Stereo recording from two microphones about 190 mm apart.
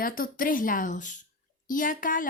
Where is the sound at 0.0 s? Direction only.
45° left (ahead or behind).